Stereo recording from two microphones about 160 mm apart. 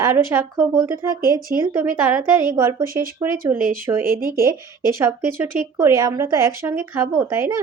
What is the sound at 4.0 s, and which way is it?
Speech, 65° right (ahead or behind).